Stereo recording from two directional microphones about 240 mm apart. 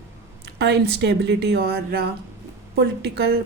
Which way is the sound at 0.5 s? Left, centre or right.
Right.